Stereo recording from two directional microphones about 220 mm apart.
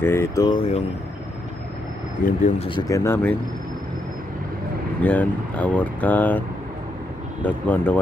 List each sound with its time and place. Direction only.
0.0 s speech: 10° left (ahead or behind)
2.2 s speech: 35° left (ahead or behind)
2.7 s speech: 15° left (ahead or behind)
5.0 s speech: 5° left (ahead or behind)
7.4 s speech: 10° left (ahead or behind)